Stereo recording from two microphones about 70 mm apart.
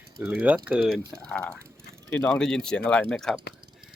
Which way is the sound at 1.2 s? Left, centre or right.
Centre.